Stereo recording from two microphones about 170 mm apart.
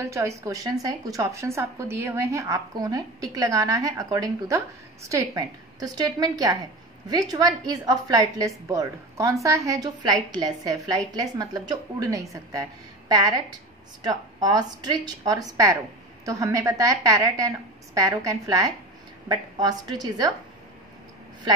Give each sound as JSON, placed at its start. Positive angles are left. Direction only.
{"t": 0.0, "sound": "a woman's voice", "side_deg": -15}